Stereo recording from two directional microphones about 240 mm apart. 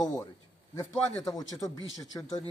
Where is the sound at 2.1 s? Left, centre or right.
Centre.